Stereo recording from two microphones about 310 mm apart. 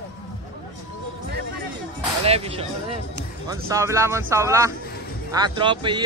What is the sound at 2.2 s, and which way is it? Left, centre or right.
Speech, centre.